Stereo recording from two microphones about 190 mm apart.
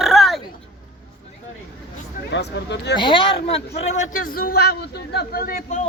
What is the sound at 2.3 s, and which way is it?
Speech, 65° left (ahead or behind).